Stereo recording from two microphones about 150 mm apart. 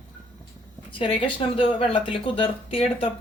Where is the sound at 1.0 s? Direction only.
35° left (ahead or behind).